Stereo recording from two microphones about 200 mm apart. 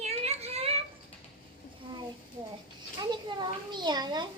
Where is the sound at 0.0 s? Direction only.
30° right (ahead or behind).